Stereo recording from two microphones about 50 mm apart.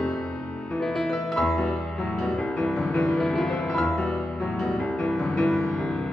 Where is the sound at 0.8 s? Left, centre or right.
Centre.